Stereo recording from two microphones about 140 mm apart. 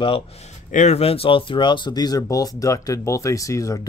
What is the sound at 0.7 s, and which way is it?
Speech, 55° left (ahead or behind).